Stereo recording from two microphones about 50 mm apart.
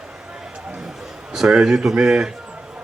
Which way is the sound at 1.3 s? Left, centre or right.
Centre.